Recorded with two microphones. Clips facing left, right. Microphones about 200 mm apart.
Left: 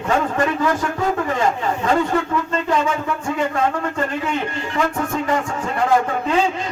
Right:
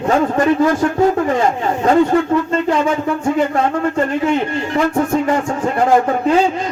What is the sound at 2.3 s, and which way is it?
Speech, 30° right (ahead or behind).